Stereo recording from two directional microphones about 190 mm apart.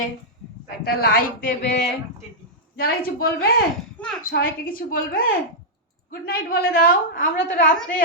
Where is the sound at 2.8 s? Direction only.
50° left (ahead or behind).